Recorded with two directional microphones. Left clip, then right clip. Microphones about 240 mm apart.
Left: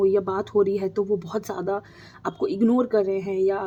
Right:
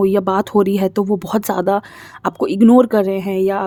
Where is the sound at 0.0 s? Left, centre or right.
Right.